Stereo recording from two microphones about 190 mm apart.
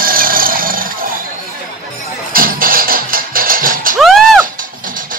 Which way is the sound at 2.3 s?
50° right (ahead or behind).